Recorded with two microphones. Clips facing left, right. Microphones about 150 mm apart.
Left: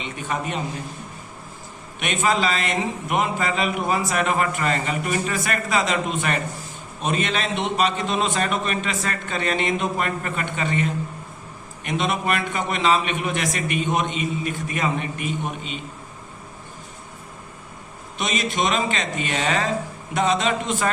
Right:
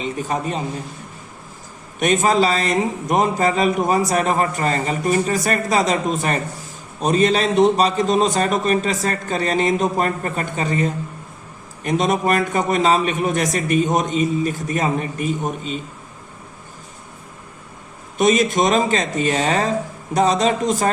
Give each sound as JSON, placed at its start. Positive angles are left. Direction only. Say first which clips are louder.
{"t": 0.0, "sound": "a man's voice", "louder": "right 5 dB", "side_deg": -40}
{"t": 2.0, "sound": "a man's voice", "louder": "right 6 dB", "side_deg": -40}
{"t": 18.2, "sound": "a man's voice", "louder": "right 8 dB", "side_deg": -45}